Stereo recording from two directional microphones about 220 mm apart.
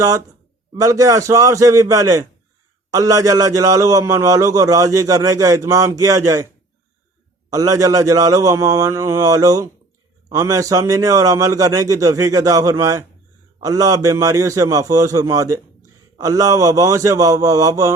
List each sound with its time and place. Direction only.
0.7 s a man's voice: 15° right (ahead or behind)
7.5 s a man's voice: 15° right (ahead or behind)